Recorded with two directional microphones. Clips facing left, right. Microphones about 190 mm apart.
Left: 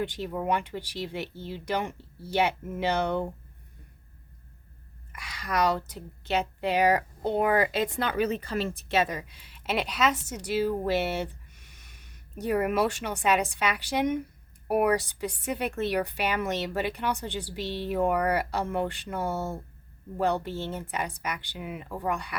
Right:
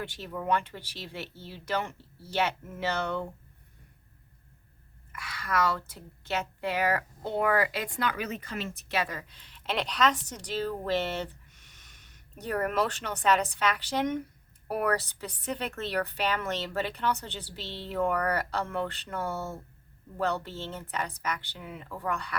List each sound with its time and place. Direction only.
0.0 s a woman's voice: 15° left (ahead or behind)
5.1 s a woman's voice: 15° left (ahead or behind)
12.4 s a woman's voice: 10° left (ahead or behind)